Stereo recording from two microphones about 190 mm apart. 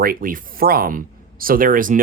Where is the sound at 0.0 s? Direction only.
50° right (ahead or behind).